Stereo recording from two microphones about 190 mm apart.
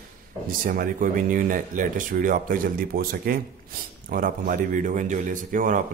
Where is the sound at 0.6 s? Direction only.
50° right (ahead or behind).